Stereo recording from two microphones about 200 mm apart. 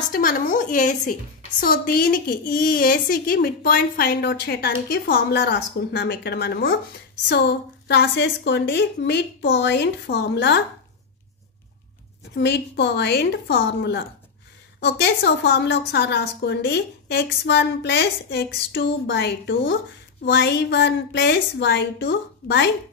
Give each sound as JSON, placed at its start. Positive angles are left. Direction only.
{"t": 0.1, "sound": "a woman's voice", "side_deg": 40}
{"t": 7.9, "sound": "a woman's voice", "side_deg": 60}
{"t": 12.4, "sound": "a woman's voice", "side_deg": 60}